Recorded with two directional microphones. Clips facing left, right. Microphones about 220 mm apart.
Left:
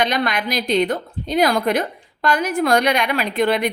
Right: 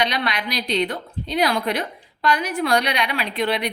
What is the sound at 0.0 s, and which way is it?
A woman's voice, 50° left (ahead or behind).